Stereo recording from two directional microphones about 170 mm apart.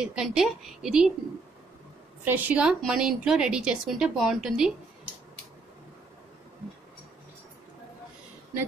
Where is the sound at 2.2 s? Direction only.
10° right (ahead or behind).